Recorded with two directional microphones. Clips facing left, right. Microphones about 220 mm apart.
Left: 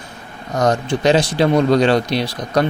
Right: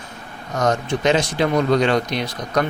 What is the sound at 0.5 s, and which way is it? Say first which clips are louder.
Speech: left 3 dB; 35° left (ahead or behind).